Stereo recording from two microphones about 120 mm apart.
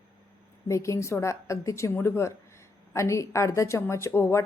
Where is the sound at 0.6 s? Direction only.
25° left (ahead or behind).